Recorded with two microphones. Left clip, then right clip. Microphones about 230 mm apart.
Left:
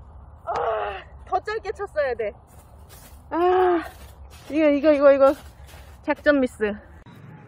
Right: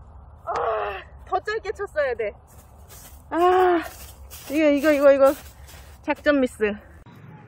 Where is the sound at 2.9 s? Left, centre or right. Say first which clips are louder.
Even; centre.